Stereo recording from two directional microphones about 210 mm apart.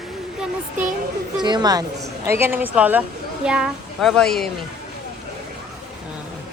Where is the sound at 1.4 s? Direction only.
20° right (ahead or behind); by 4.5 s centre (ahead or behind).